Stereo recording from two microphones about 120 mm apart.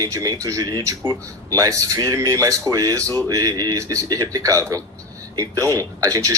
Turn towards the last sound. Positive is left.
turn(degrees=-30)  # may be behind; listen again after turning